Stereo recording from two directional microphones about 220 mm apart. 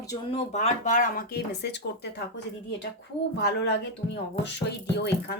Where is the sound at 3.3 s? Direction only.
50° left (ahead or behind).